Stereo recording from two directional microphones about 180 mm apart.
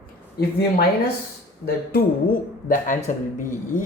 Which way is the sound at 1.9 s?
50° left (ahead or behind).